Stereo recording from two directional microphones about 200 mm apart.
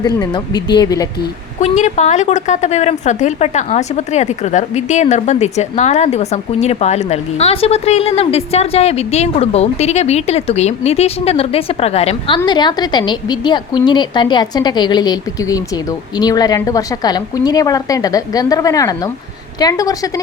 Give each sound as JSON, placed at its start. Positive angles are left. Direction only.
{"t": 0.0, "sound": "a woman's voice", "side_deg": 20}
{"t": 1.6, "sound": "a woman's voice", "side_deg": 35}